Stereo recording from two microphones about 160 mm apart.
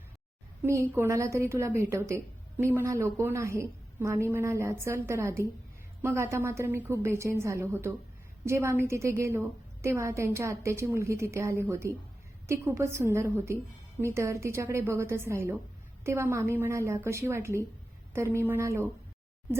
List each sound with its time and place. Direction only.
0.6 s a woman's voice: 15° right (ahead or behind)